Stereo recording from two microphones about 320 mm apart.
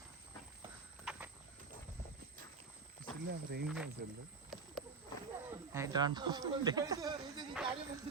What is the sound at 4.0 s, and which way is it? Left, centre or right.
Speech, right.